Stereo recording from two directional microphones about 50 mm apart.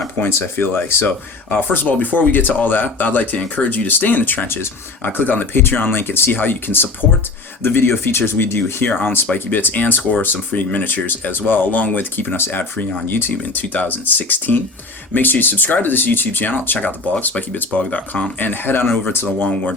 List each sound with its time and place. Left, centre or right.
0.3 s speech: left
4.4 s speech: left
5.0 s speech: left
13.3 s speech: left
19.4 s speech: left